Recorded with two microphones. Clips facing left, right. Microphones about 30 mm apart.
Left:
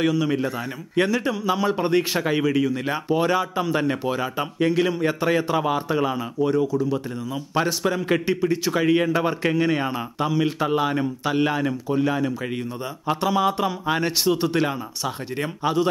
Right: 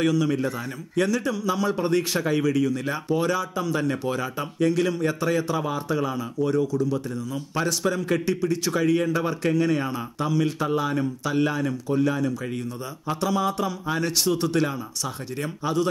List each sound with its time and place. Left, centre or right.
0.0 s a man's voice: centre